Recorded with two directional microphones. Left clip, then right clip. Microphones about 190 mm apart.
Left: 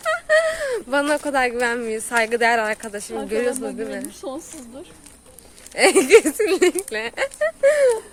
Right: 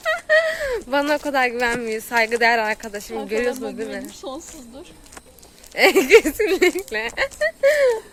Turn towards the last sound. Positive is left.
turn(degrees=5)  # may be behind; listen again after turning